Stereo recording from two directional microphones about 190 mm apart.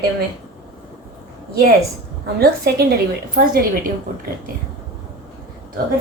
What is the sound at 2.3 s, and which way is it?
A woman's voice, 55° right (ahead or behind).